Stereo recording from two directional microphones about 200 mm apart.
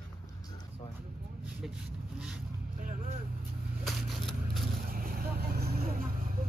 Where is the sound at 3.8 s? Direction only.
Centre (ahead or behind).